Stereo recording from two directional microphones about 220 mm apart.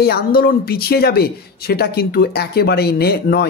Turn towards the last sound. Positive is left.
turn(degrees=45)  # may be behind; listen again after turning